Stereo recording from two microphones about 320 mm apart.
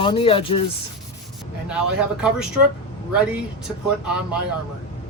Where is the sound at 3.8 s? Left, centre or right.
Centre.